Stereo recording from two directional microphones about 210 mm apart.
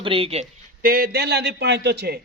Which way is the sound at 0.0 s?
25° right (ahead or behind).